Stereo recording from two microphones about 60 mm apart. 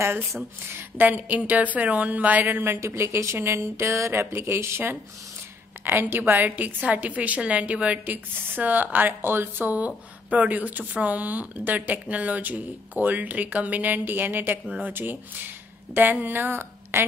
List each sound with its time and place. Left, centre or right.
0.9 s speech: right
2.4 s a woman's voice: right